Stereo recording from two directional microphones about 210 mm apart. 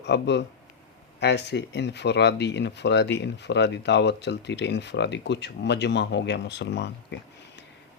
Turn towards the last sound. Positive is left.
turn(degrees=55)  # may be behind; listen again after turning